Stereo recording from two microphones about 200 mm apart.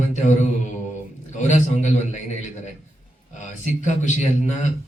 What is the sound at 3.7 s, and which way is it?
Speech, 40° left (ahead or behind).